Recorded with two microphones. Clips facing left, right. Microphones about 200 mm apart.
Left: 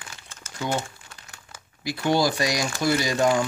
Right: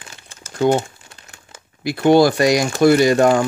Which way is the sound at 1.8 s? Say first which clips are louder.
Right 10 dB; 60° right (ahead or behind).